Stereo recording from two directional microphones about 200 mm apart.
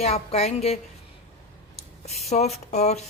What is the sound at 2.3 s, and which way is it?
Speech, 35° left (ahead or behind).